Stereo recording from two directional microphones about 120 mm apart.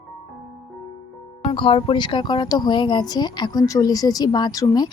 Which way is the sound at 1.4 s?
50° left (ahead or behind).